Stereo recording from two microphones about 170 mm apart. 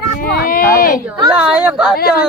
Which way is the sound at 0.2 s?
55° left (ahead or behind).